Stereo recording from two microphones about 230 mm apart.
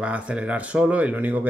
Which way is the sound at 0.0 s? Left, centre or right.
Centre.